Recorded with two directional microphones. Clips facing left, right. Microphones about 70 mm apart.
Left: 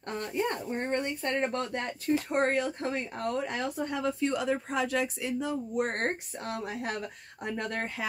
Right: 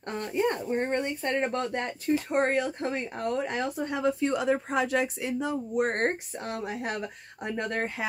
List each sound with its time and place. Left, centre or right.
0.2 s a woman's voice: right